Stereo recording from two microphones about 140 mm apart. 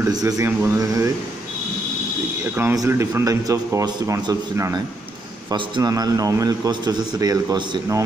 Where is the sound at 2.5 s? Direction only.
20° right (ahead or behind).